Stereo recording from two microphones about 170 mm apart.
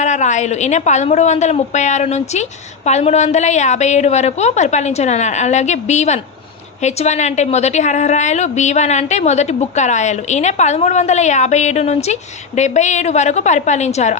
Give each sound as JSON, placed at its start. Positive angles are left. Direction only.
{"t": 0.0, "sound": "a woman's voice", "side_deg": 45}